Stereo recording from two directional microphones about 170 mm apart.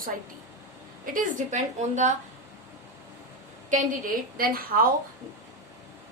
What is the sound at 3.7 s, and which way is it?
A woman's voice, 50° right (ahead or behind).